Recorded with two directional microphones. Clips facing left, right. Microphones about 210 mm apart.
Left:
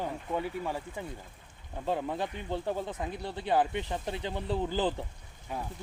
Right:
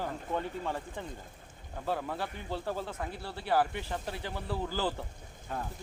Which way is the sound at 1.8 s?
20° left (ahead or behind).